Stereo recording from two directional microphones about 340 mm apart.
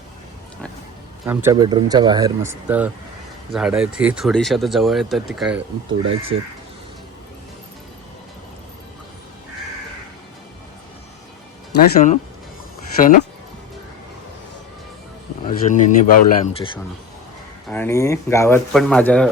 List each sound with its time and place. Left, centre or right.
1.2 s speech: centre
5.9 s speech: right
11.9 s speech: left
15.4 s speech: left
17.7 s speech: centre